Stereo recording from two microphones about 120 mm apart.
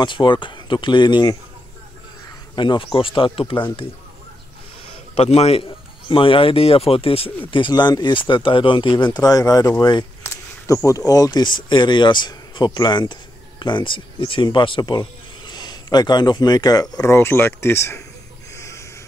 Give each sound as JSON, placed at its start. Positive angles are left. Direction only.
{"t": 0.0, "sound": "speech", "side_deg": 40}
{"t": 2.5, "sound": "a man's voice", "side_deg": 40}
{"t": 5.1, "sound": "a man's voice", "side_deg": 60}
{"t": 9.2, "sound": "speech", "side_deg": 30}
{"t": 10.2, "sound": "speech", "side_deg": 20}
{"t": 18.6, "sound": "a sound", "side_deg": 25}